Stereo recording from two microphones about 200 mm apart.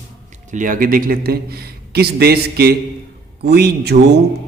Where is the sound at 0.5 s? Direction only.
40° right (ahead or behind).